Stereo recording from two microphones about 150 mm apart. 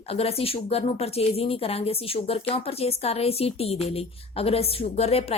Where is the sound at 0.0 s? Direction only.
40° left (ahead or behind).